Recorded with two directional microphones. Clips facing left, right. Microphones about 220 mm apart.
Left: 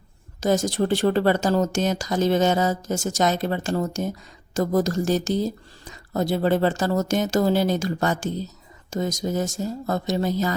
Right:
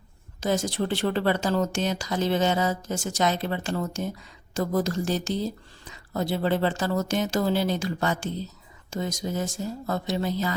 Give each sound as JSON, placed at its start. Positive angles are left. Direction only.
{"t": 0.3, "sound": "speech", "side_deg": 45}